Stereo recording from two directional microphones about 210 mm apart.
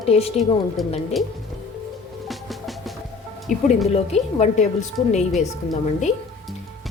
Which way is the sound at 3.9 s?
30° left (ahead or behind).